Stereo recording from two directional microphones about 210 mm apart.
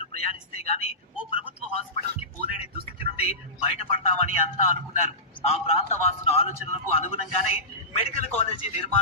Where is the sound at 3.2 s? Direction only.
30° left (ahead or behind).